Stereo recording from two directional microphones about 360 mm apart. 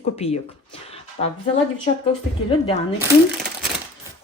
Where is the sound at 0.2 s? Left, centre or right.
Centre.